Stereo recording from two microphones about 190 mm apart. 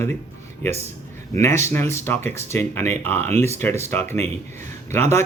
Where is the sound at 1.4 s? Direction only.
15° left (ahead or behind).